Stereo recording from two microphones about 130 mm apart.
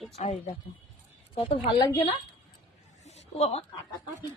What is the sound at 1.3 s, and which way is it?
Speech, 45° left (ahead or behind).